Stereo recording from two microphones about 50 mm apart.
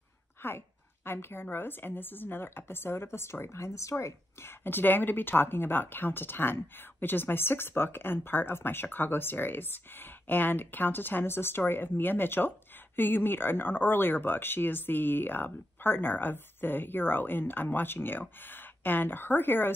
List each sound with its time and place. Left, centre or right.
0.4 s speech: left
3.9 s speech: left
4.6 s speech: left